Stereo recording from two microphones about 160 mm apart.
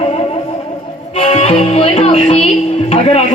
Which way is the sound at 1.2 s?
40° left (ahead or behind).